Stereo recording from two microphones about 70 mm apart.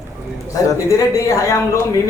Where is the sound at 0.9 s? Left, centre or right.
Left.